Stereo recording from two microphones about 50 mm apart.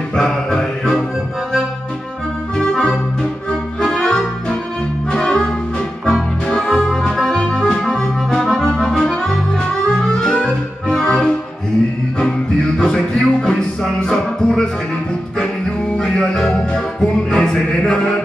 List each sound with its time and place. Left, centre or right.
0.1 s music: centre
3.8 s organ: centre
5.1 s music: centre
6.5 s music: centre
8.8 s accordion: centre
9.9 s music: centre
12.7 s music: centre
16.0 s music: centre